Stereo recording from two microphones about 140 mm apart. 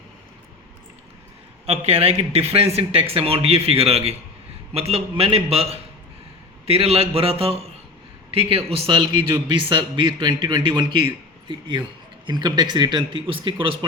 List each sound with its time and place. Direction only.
1.6 s speech: 50° right (ahead or behind)